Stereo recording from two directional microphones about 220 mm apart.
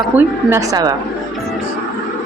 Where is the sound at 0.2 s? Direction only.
15° right (ahead or behind).